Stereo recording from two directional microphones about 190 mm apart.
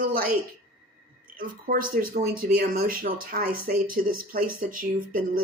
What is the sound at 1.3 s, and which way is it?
Speech, 45° right (ahead or behind).